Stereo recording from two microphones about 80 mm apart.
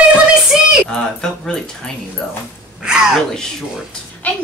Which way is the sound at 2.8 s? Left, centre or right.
Centre.